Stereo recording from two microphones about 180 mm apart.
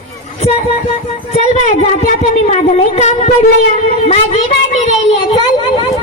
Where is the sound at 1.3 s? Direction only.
40° left (ahead or behind).